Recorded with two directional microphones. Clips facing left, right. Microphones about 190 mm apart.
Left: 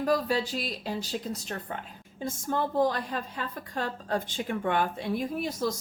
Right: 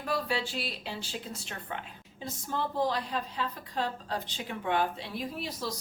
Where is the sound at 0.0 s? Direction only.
40° left (ahead or behind).